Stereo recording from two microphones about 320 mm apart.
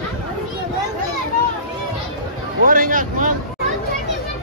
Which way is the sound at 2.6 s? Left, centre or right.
Right.